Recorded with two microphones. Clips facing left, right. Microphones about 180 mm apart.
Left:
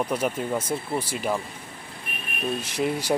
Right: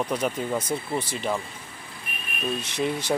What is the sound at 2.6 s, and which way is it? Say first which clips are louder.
Speech: left 1 dB; 10° left (ahead or behind).